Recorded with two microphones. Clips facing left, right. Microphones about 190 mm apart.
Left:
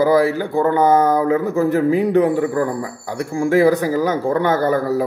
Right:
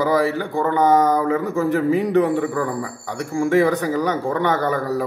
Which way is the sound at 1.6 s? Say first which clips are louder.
Left 2 dB; 15° left (ahead or behind).